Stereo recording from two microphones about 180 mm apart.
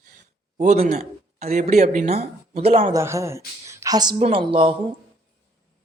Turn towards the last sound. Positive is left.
turn(degrees=-30)  # may be behind; listen again after turning